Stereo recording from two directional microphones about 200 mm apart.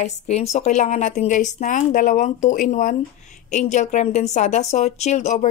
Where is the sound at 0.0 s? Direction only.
35° left (ahead or behind).